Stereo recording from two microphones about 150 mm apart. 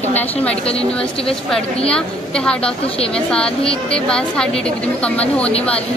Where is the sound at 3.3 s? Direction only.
5° left (ahead or behind).